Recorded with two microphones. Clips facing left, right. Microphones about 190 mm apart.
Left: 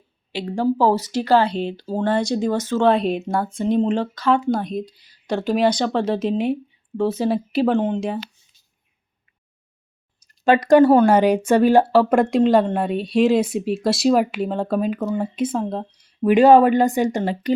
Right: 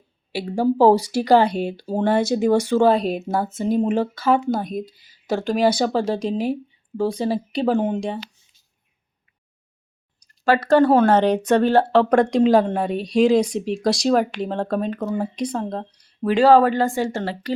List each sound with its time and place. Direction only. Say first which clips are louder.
0.3 s speech: right 2 dB; 10° right (ahead or behind)
2.9 s a woman's voice: left 1 dB; centre (ahead or behind)
7.8 s speech: left 1 dB; 10° right (ahead or behind)
10.2 s a sound: left 2 dB; 20° left (ahead or behind)
10.8 s a woman's voice: left 2 dB; 5° left (ahead or behind)